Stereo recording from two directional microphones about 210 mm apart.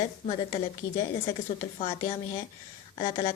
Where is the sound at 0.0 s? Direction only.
20° left (ahead or behind).